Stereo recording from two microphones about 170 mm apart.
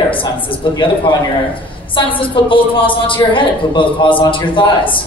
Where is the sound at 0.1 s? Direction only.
30° left (ahead or behind).